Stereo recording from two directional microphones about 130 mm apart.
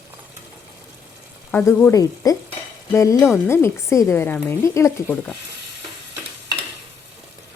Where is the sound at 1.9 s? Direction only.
25° left (ahead or behind).